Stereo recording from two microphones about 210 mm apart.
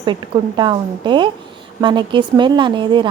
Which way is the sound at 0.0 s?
20° right (ahead or behind).